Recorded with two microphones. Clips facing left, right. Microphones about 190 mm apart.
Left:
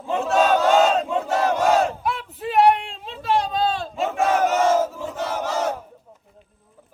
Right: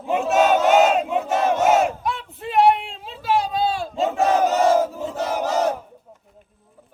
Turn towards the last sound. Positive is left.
turn(degrees=-35)  # may be behind; listen again after turning